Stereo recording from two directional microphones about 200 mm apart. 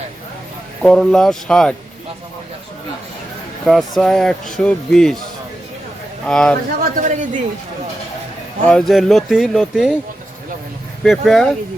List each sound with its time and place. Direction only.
0.8 s speech: 5° left (ahead or behind)
3.7 s speech: centre (ahead or behind)
6.2 s speech: 5° left (ahead or behind)
6.9 s a woman's voice: 40° right (ahead or behind)
8.6 s speech: centre (ahead or behind)
11.0 s speech: centre (ahead or behind)